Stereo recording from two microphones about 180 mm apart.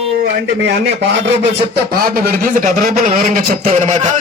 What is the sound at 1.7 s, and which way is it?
Speech, 55° right (ahead or behind).